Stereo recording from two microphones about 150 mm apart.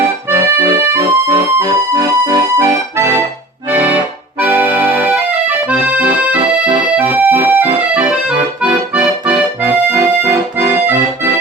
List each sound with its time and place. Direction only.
0.5 s music: 15° right (ahead or behind)
4.4 s accordion: 10° right (ahead or behind)